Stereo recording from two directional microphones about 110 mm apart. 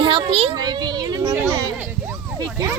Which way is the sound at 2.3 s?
35° right (ahead or behind).